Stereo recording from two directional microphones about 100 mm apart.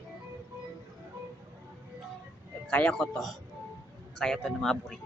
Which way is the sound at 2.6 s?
10° left (ahead or behind).